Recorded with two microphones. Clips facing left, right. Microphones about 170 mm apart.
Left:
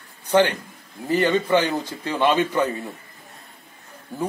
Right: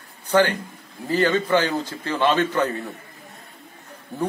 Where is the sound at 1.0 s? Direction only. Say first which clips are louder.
Even; 20° left (ahead or behind).